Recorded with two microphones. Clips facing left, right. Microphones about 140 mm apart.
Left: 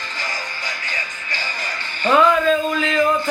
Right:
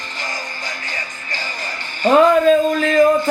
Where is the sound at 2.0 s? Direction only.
35° right (ahead or behind).